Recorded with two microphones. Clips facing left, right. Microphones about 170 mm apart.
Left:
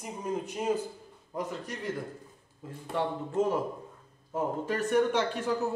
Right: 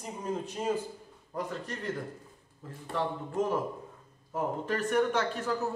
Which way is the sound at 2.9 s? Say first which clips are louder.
Left 2 dB; 15° left (ahead or behind).